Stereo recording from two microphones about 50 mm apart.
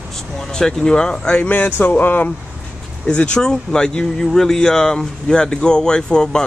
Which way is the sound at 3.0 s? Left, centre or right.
Centre.